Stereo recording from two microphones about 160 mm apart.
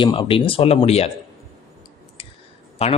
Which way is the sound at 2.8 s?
40° left (ahead or behind).